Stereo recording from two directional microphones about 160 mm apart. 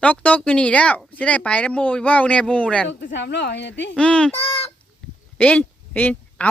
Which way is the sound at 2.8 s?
90° left.